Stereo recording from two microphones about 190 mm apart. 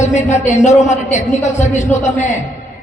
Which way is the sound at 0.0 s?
40° left (ahead or behind).